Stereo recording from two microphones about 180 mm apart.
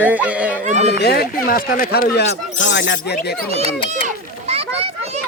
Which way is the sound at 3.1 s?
55° left (ahead or behind).